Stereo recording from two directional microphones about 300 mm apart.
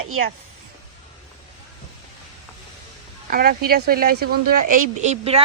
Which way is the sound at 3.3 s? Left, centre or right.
Right.